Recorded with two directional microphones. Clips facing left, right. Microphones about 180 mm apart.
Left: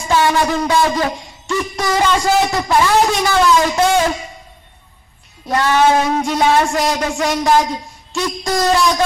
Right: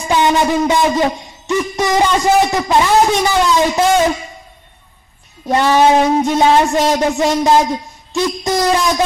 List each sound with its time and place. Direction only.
0.1 s a sound: 20° right (ahead or behind)
1.5 s a man's voice: 20° right (ahead or behind)
5.5 s a man's voice: 20° right (ahead or behind)